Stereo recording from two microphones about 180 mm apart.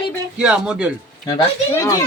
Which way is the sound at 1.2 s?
20° left (ahead or behind).